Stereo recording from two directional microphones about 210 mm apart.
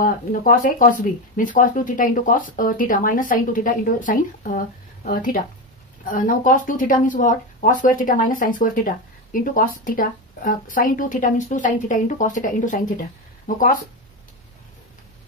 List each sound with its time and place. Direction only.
0.0 s speech: 40° left (ahead or behind)